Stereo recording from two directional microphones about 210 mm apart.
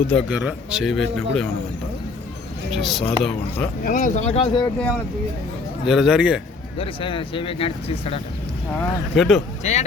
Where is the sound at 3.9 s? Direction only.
40° left (ahead or behind).